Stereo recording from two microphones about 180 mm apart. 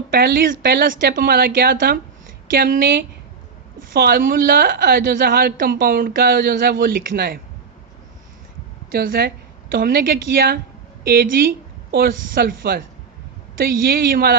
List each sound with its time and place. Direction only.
0.1 s speech: 60° right (ahead or behind)
8.9 s a woman's voice: 60° right (ahead or behind)